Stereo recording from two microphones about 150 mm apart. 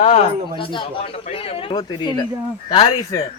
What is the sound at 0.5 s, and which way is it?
A man's voice, 35° left (ahead or behind).